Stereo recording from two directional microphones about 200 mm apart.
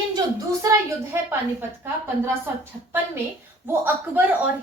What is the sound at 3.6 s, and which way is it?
Speech, 10° right (ahead or behind).